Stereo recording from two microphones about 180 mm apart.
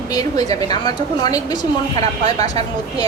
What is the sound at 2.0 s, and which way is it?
Speech, 40° right (ahead or behind).